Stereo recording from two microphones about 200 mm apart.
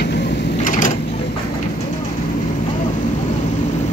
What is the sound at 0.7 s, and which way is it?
Sewing machine, 40° left (ahead or behind).